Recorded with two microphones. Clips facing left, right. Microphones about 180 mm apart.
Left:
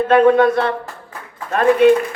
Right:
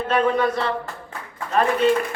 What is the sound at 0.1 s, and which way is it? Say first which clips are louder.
Speech: left 8 dB; 60° left (ahead or behind).